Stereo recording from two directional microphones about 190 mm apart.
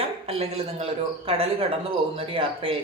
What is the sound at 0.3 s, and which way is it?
Speech, 30° right (ahead or behind).